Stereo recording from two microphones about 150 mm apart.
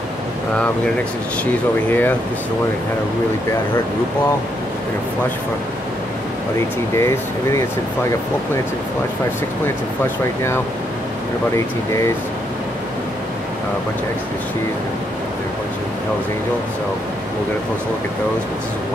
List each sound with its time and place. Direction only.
1.4 s speech: 10° left (ahead or behind)
7.0 s speech: 15° left (ahead or behind)